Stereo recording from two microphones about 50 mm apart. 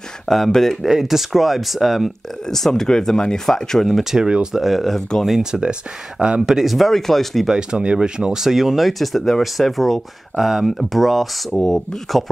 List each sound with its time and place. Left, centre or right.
0.3 s speech: centre
0.8 s speech: centre
2.4 s speech: centre
4.0 s speech: centre
4.6 s speech: centre
5.4 s speech: centre
6.7 s speech: centre
7.4 s speech: centre